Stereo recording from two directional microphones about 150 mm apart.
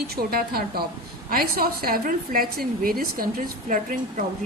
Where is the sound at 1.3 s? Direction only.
80° right.